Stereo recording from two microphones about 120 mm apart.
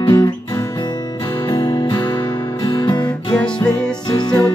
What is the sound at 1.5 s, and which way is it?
Music, 35° left (ahead or behind).